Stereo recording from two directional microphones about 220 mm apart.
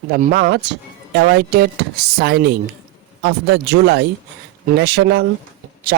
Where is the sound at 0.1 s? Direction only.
40° right (ahead or behind).